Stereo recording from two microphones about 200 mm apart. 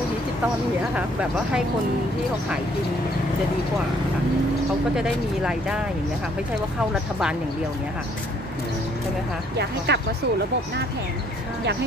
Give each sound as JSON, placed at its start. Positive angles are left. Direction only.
{"t": 4.9, "sound": "speech", "side_deg": -5}
{"t": 9.9, "sound": "speech", "side_deg": -55}